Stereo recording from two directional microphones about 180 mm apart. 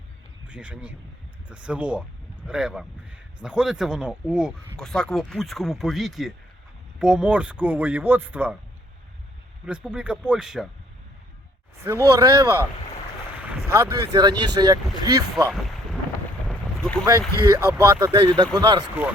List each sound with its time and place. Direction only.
0.4 s speech: 5° right (ahead or behind)
9.6 s speech: 5° right (ahead or behind)
11.8 s speech: 15° right (ahead or behind)
15.4 s boat: centre (ahead or behind)
17.4 s speech: 15° right (ahead or behind)